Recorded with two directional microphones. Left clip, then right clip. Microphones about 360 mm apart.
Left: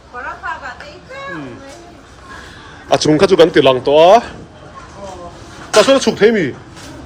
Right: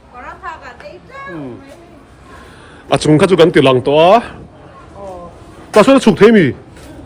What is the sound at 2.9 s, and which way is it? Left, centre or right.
A man's voice, right.